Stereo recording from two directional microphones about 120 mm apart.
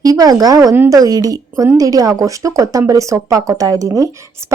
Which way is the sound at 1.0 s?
30° right (ahead or behind).